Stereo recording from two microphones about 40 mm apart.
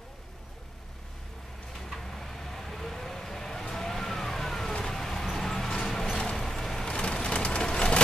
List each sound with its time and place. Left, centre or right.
1.8 s vehicle: centre
6.9 s vehicle: left